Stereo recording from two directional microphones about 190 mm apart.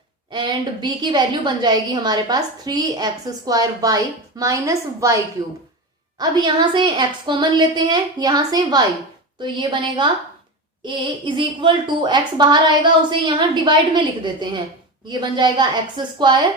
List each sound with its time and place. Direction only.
0.3 s a woman's voice: 25° right (ahead or behind)
15.2 s a woman's voice: 25° right (ahead or behind)